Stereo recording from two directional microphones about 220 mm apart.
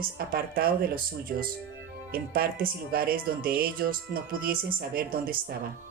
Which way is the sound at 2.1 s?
40° right (ahead or behind).